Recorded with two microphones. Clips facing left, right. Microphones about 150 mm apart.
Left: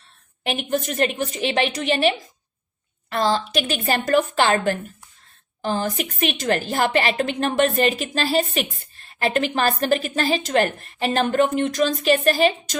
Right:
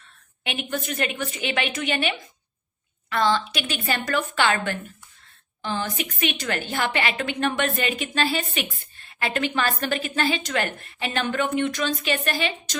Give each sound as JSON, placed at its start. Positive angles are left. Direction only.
{"t": 0.4, "sound": "a woman's voice", "side_deg": 40}